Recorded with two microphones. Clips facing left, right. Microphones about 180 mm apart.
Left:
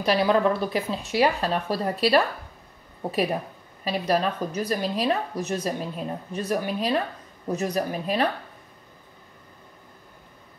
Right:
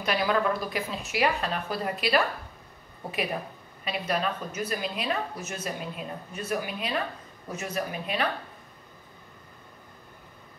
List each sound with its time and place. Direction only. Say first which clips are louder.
0.0 s a woman's voice: left 5 dB; 35° left (ahead or behind)
3.8 s a woman's voice: left 5 dB; 35° left (ahead or behind)